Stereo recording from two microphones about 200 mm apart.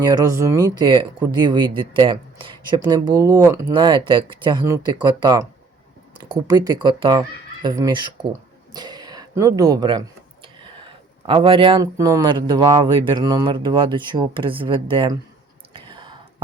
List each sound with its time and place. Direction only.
0.0 s speech: 20° right (ahead or behind)
15.7 s whispering: 25° right (ahead or behind)